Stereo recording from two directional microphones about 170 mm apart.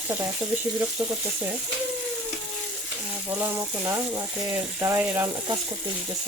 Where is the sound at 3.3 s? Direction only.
15° right (ahead or behind).